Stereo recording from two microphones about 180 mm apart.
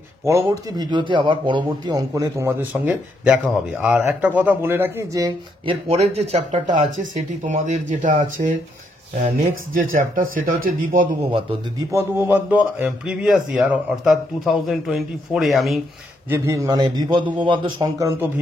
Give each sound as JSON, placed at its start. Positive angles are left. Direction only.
{"t": 0.2, "sound": "a man's voice", "side_deg": -15}
{"t": 5.7, "sound": "speech", "side_deg": -35}
{"t": 10.1, "sound": "speech", "side_deg": -50}
{"t": 11.9, "sound": "speech", "side_deg": -10}
{"t": 16.3, "sound": "a man's voice", "side_deg": -15}